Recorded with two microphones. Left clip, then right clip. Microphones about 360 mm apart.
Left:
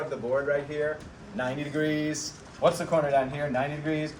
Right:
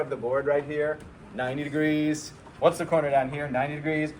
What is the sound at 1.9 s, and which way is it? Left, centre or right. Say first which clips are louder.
Speech: right 3 dB; right.